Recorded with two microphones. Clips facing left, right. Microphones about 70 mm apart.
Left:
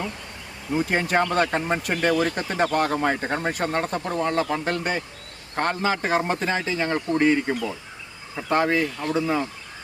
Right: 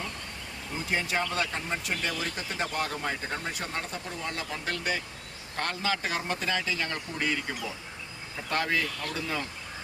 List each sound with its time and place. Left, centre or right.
0.7 s speech: left
4.5 s speech: left